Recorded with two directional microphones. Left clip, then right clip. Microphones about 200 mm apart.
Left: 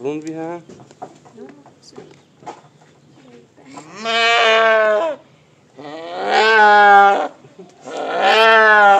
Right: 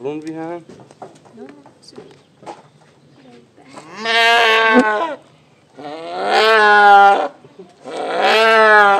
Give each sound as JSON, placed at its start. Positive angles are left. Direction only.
{"t": 0.0, "sound": "speech", "side_deg": 25}
{"t": 1.9, "sound": "speech", "side_deg": -15}
{"t": 3.9, "sound": "sheep", "side_deg": -30}
{"t": 5.8, "sound": "wild animals", "side_deg": -20}
{"t": 7.8, "sound": "cat", "side_deg": -15}